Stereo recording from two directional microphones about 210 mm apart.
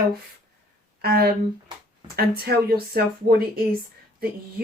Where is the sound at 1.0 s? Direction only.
45° right (ahead or behind).